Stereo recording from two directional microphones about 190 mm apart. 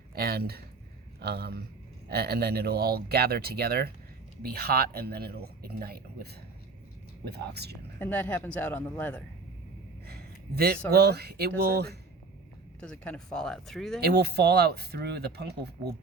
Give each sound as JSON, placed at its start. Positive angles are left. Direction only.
{"t": 0.1, "sound": "speech", "side_deg": -55}
{"t": 7.3, "sound": "speech", "side_deg": -60}
{"t": 7.9, "sound": "speech", "side_deg": 10}
{"t": 10.1, "sound": "a sound", "side_deg": -55}
{"t": 10.9, "sound": "speech", "side_deg": -60}
{"t": 12.8, "sound": "speech", "side_deg": 5}
{"t": 14.0, "sound": "speech", "side_deg": -60}